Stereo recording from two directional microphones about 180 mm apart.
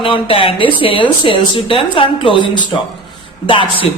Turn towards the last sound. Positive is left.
turn(degrees=30)  # may be behind; listen again after turning